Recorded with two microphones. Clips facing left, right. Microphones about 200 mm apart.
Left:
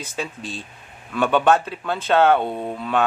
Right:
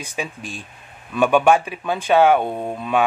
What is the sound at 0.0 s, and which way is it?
Speech, 15° right (ahead or behind).